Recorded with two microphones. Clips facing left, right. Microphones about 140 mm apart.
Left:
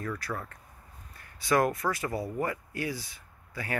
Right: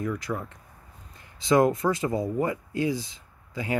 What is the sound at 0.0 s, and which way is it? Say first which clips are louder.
Speech: right 5 dB; 15° right (ahead or behind).